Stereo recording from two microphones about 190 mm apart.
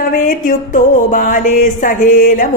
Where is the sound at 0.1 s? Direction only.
45° left (ahead or behind).